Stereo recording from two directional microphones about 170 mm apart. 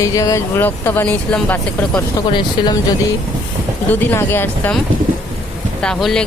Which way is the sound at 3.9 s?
10° left (ahead or behind).